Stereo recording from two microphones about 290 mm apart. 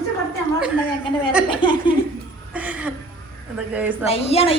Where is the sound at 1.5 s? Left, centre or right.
Centre.